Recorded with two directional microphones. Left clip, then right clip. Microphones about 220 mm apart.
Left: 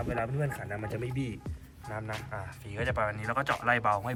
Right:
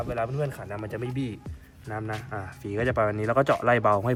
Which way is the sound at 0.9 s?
35° right (ahead or behind).